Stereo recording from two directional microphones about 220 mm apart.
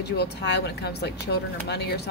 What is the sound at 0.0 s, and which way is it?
Speech, 50° left (ahead or behind).